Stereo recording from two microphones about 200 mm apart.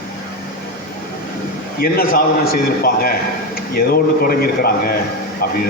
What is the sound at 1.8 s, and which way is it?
A man's voice, 50° left (ahead or behind).